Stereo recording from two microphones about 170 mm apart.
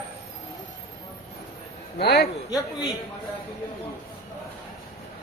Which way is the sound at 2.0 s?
75° left (ahead or behind).